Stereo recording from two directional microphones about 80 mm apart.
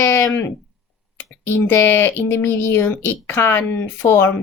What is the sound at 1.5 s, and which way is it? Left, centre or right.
Speech, left.